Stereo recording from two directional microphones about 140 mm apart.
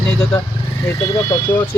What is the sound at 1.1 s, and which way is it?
Speech, 25° left (ahead or behind).